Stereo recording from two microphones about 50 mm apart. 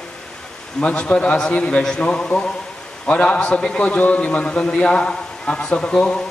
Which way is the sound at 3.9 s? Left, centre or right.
Left.